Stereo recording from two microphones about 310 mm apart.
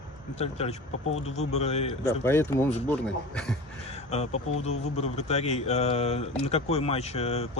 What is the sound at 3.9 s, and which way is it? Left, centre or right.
Speech, left.